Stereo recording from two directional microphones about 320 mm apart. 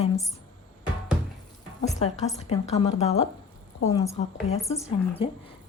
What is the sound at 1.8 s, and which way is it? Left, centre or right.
A woman's voice, left.